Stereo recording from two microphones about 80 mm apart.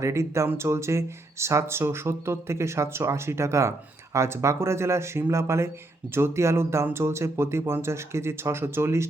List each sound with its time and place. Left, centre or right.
0.0 s speech: right